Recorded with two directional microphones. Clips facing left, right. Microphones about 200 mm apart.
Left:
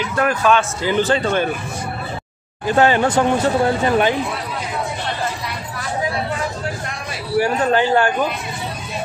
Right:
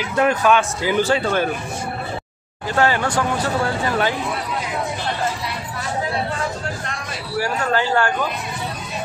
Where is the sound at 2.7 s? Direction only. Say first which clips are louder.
Left 4 dB; 20° left (ahead or behind).